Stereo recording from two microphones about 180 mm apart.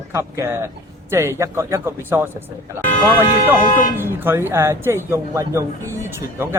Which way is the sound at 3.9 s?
10° right (ahead or behind).